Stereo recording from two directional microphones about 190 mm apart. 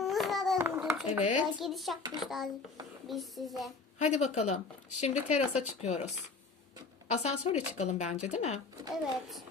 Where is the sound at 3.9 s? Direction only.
35° left (ahead or behind).